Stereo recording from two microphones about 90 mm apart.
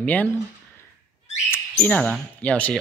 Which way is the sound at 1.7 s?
15° left (ahead or behind).